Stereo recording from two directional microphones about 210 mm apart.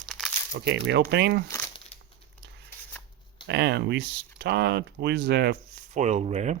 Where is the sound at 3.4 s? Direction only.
55° right (ahead or behind).